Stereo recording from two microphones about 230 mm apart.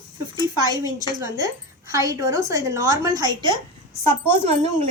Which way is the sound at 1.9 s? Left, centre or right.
Centre.